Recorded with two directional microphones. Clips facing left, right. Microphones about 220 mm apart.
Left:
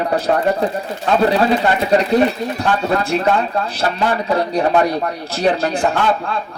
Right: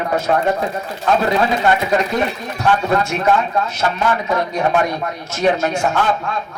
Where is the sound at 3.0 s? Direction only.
35° left (ahead or behind).